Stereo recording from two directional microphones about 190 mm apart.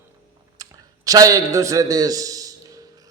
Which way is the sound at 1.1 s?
20° right (ahead or behind).